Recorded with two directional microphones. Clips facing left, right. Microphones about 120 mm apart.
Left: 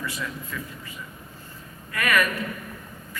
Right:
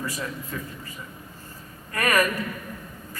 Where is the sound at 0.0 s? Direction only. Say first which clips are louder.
Right 1 dB; 40° right (ahead or behind).